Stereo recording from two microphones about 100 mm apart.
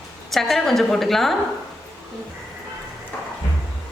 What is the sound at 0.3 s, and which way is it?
Speech, centre (ahead or behind).